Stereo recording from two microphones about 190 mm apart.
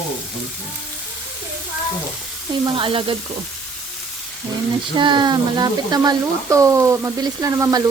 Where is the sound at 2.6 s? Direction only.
25° right (ahead or behind).